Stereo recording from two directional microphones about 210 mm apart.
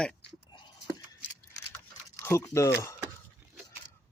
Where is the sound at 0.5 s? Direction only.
20° left (ahead or behind).